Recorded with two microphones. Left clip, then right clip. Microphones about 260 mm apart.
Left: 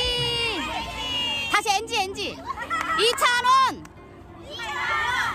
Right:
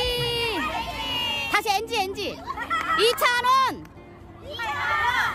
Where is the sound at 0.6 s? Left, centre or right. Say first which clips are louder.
Right 1 dB; centre.